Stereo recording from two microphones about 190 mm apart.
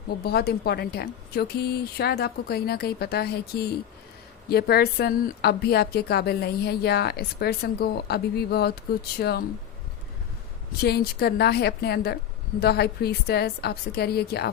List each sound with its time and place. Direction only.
0.2 s speech: 55° left (ahead or behind)
10.8 s speech: 55° left (ahead or behind)